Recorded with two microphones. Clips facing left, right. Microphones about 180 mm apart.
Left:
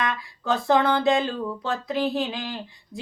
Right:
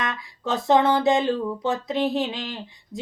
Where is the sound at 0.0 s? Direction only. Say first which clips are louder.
Left 1 dB; 20° right (ahead or behind).